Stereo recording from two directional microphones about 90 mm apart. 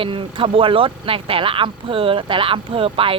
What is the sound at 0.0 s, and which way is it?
Speech, 75° right (ahead or behind).